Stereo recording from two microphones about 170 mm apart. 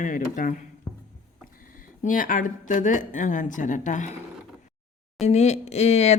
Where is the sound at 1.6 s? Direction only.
55° left (ahead or behind).